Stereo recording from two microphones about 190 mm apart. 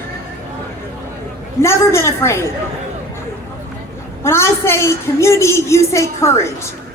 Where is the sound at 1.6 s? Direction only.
15° left (ahead or behind).